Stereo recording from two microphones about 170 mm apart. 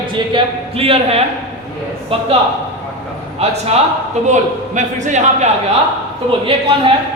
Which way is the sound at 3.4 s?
35° right (ahead or behind).